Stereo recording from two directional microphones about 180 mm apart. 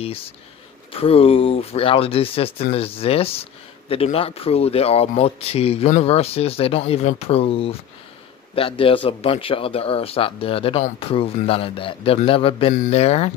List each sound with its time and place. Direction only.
1.0 s speech: 30° left (ahead or behind)